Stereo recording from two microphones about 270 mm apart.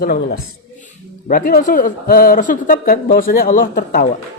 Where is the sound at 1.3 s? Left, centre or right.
Left.